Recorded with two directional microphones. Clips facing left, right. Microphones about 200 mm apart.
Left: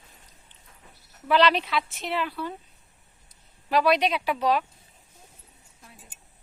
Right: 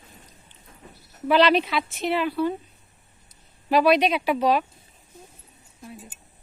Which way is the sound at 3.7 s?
5° right (ahead or behind).